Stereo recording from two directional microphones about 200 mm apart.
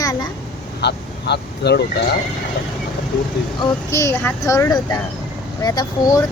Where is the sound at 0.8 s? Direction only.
55° left (ahead or behind).